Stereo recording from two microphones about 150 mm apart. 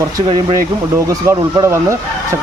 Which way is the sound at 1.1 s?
20° right (ahead or behind).